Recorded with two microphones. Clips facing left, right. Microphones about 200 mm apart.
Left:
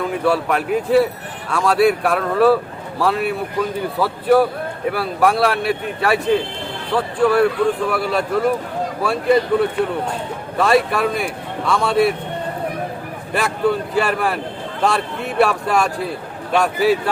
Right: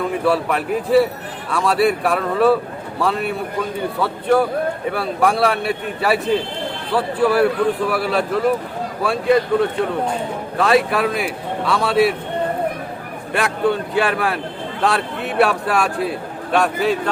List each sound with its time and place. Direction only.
0.3 s a man's voice: centre (ahead or behind)
13.3 s a man's voice: centre (ahead or behind)